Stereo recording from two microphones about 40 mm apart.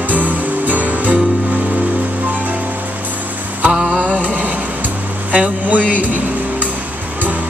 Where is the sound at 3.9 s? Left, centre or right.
Right.